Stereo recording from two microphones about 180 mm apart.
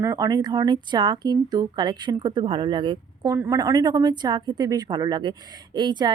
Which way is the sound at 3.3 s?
15° right (ahead or behind).